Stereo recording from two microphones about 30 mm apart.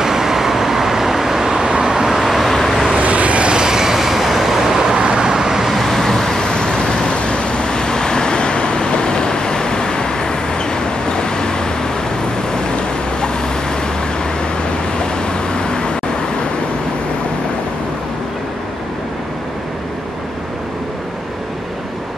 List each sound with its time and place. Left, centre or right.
0.0 s vehicle: centre
2.3 s vehicle: centre
3.0 s vehicle: right
3.4 s vehicle: right
4.9 s vehicle: right
5.7 s vehicle: centre
6.4 s vehicle: left
7.1 s vehicle: left
15.0 s vehicle: left